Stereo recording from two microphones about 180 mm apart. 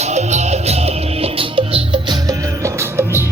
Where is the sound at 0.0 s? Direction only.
40° right (ahead or behind).